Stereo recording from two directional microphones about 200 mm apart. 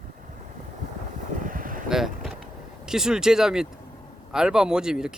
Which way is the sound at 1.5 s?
45° right (ahead or behind).